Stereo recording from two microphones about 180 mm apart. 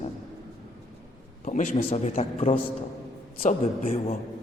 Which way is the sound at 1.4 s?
45° left (ahead or behind).